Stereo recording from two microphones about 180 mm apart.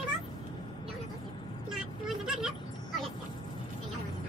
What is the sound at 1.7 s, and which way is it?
Vehicle, centre (ahead or behind).